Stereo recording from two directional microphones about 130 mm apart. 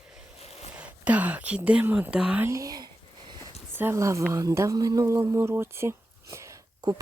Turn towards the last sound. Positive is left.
turn(degrees=-25)  # may be behind; listen again after turning